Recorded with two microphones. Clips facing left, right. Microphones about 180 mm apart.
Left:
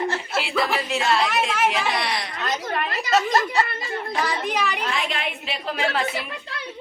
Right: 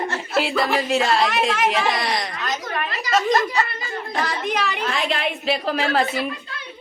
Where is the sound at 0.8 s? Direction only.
40° right (ahead or behind).